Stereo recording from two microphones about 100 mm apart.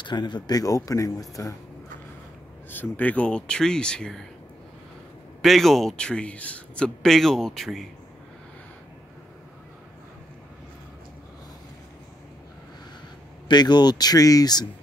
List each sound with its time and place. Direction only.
0.0 s speech: 45° left (ahead or behind)
2.7 s speech: 15° left (ahead or behind)
5.4 s a man's voice: centre (ahead or behind)
13.5 s speech: 45° left (ahead or behind)